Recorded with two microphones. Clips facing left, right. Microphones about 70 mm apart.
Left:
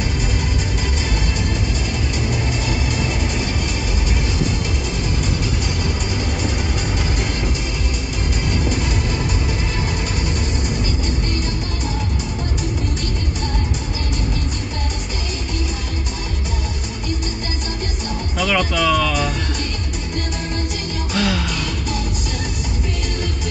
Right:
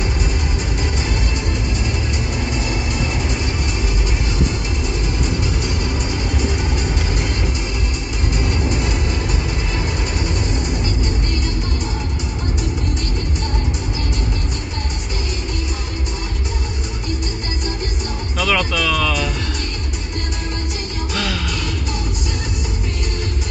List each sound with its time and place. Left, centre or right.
18.4 s music: left
21.1 s music: centre